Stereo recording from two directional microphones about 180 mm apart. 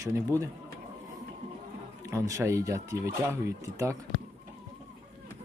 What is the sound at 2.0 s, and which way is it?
Speech, 15° right (ahead or behind).